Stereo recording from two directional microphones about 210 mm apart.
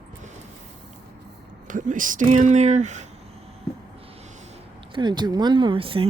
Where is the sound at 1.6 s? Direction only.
40° right (ahead or behind).